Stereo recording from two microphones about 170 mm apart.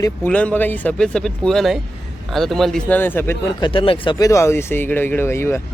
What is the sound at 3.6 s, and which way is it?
Speech, 30° left (ahead or behind).